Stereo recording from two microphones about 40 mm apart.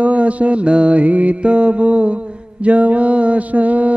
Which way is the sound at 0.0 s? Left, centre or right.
Right.